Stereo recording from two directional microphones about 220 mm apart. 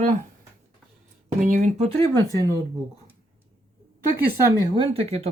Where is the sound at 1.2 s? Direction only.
35° right (ahead or behind).